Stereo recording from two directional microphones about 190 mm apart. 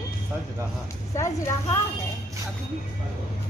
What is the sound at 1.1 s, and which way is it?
Speech, 15° left (ahead or behind).